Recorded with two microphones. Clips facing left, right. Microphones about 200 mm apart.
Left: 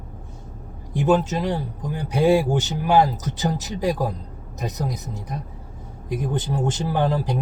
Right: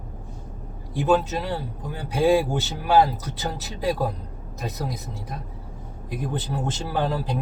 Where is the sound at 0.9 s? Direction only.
15° left (ahead or behind).